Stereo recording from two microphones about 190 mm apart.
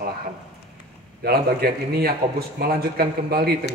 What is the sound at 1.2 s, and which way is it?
A man's voice, 55° right (ahead or behind).